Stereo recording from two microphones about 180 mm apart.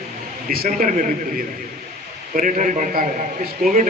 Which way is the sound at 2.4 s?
45° right (ahead or behind).